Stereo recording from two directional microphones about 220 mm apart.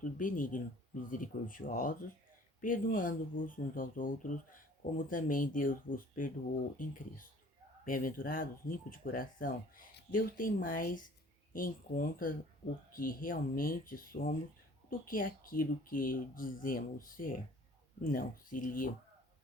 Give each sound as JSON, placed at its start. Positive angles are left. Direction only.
{"t": 0.0, "sound": "speech", "side_deg": 35}